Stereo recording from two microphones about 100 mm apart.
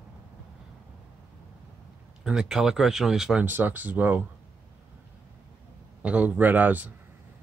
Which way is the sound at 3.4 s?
20° right (ahead or behind).